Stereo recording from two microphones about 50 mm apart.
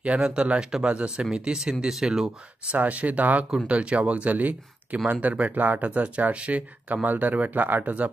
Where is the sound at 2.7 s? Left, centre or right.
Right.